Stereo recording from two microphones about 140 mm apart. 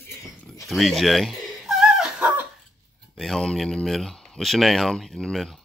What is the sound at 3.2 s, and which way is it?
A child's voice, centre (ahead or behind).